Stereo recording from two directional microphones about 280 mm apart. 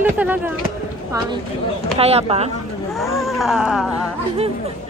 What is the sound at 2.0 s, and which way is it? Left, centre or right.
Speech, right.